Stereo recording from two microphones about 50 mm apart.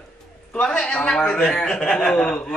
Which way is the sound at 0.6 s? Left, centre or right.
Left.